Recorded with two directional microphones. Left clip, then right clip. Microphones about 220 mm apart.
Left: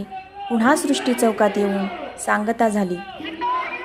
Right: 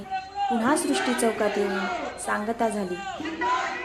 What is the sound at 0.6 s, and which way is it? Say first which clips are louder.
A woman's voice: left 9 dB; 40° left (ahead or behind).